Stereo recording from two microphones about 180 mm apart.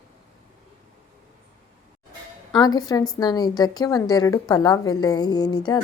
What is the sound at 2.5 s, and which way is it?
A woman's voice, 20° left (ahead or behind).